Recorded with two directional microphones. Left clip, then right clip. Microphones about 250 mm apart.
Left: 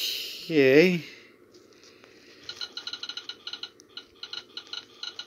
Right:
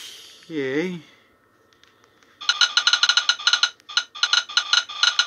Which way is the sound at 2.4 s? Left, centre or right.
Right.